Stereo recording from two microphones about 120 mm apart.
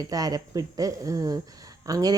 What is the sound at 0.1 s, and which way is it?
Speech, 30° right (ahead or behind).